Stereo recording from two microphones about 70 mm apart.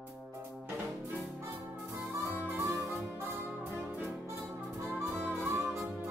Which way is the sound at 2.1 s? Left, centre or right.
Right.